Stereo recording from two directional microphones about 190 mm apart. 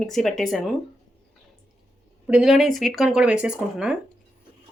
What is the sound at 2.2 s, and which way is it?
Speech, 5° right (ahead or behind).